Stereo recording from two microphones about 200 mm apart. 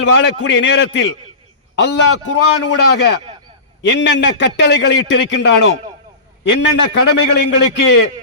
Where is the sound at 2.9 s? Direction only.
55° left (ahead or behind).